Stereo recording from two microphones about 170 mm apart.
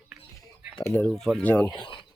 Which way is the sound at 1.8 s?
30° left (ahead or behind).